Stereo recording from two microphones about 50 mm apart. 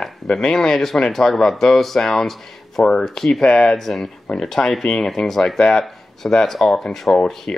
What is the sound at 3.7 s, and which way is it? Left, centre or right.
Speech, centre.